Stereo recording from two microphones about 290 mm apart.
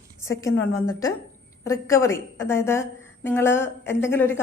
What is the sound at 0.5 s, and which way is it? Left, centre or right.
Speech, left.